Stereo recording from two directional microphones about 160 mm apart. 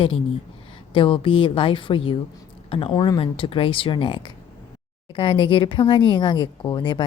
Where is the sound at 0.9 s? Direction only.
35° left (ahead or behind).